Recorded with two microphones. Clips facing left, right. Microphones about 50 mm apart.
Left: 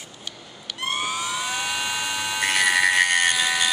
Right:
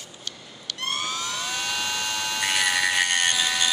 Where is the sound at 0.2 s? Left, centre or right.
Centre.